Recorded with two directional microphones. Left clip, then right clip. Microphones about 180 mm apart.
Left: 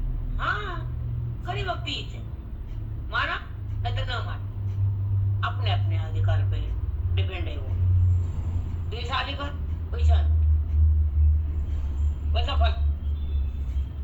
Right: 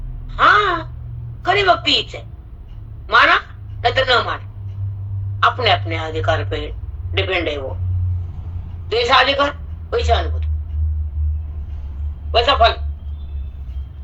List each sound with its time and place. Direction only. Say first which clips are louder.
0.3 s a sound: right 17 dB; 55° right (ahead or behind)
1.5 s speech: right 17 dB; 55° right (ahead or behind)
5.4 s speech: right 17 dB; 60° right (ahead or behind)
8.9 s a woman's voice: right 17 dB; 60° right (ahead or behind)
12.3 s speech: right 17 dB; 55° right (ahead or behind)